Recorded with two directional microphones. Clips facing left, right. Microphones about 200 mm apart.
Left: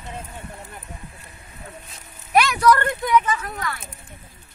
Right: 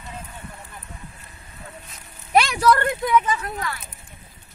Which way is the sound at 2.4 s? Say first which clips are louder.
Left 1 dB; 25° right (ahead or behind).